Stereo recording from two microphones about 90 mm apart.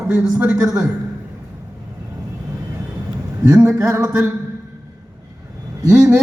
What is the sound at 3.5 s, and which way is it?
Speech, 35° right (ahead or behind).